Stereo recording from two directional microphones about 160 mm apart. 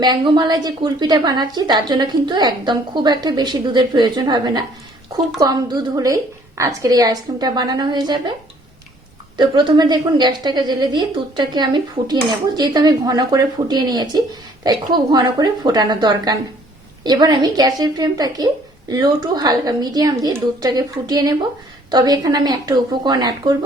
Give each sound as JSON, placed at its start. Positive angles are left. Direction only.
{"t": 0.0, "sound": "a woman's voice", "side_deg": -25}
{"t": 9.4, "sound": "a woman's voice", "side_deg": -30}